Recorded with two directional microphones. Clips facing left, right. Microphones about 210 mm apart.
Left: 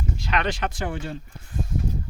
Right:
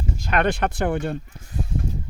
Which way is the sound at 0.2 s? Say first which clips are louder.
Right 5 dB; 50° right (ahead or behind).